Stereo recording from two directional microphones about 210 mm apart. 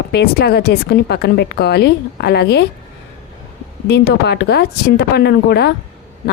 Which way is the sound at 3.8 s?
50° left (ahead or behind).